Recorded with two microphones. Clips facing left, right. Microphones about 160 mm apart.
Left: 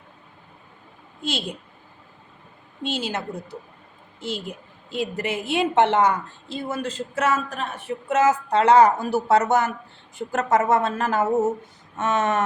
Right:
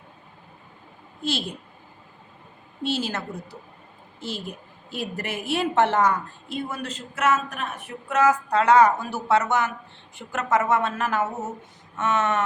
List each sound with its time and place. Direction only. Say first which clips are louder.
1.2 s a woman's voice: even; 20° left (ahead or behind)
2.8 s a woman's voice: even; 20° left (ahead or behind); by 12.4 s 35° left (ahead or behind)